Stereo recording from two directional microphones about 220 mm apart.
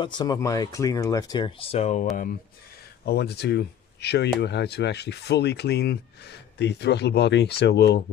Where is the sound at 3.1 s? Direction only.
45° left (ahead or behind).